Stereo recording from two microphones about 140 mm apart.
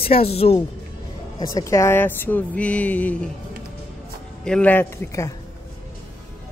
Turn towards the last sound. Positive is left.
turn(degrees=20)  # may be behind; listen again after turning